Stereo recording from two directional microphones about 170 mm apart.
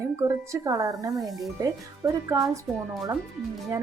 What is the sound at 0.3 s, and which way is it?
Speech, 20° right (ahead or behind).